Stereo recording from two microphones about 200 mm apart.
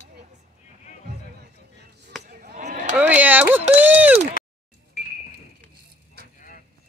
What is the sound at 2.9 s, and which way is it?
Speech, 10° right (ahead or behind).